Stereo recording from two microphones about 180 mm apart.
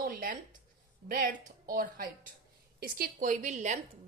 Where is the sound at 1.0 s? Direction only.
55° right (ahead or behind).